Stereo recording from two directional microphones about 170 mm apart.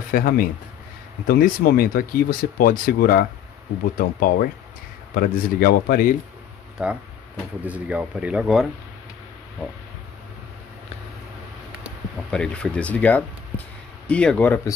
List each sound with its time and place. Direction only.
0.1 s speech: 55° left (ahead or behind)
6.8 s speech: 5° right (ahead or behind)
12.3 s speech: 5° left (ahead or behind)